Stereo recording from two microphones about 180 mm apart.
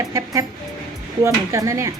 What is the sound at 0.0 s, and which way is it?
Speech, 15° right (ahead or behind).